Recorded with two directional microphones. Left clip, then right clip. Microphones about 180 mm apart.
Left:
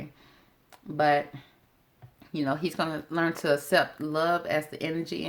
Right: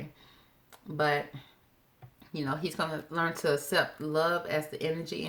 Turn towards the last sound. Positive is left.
turn(degrees=40)  # may be behind; listen again after turning